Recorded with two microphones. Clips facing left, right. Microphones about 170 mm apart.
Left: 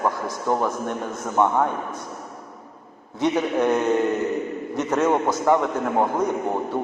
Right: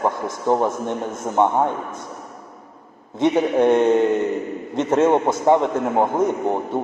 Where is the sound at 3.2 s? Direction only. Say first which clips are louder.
Right 4 dB; 25° right (ahead or behind).